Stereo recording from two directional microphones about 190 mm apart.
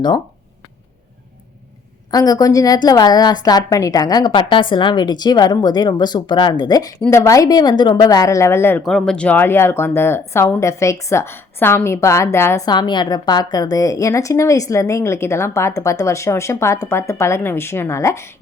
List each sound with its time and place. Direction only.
2.0 s a woman's voice: 20° left (ahead or behind)
8.8 s speech: centre (ahead or behind)